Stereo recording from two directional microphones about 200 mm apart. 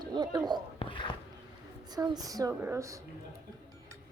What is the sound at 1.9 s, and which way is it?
Speech, 20° right (ahead or behind).